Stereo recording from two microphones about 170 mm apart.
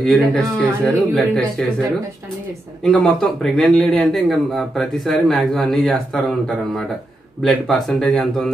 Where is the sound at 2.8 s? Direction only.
5° left (ahead or behind).